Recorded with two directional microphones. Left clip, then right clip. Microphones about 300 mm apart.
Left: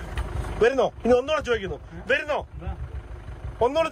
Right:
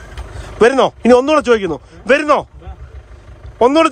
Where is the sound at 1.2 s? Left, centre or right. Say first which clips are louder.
Right 13 dB; centre.